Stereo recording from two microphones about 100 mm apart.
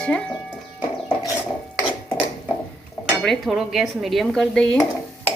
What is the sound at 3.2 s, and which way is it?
Speech, centre (ahead or behind).